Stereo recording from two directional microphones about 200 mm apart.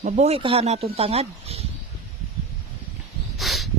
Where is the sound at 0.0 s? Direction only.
30° right (ahead or behind).